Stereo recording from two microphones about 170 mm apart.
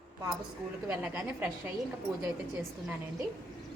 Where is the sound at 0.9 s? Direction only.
10° right (ahead or behind).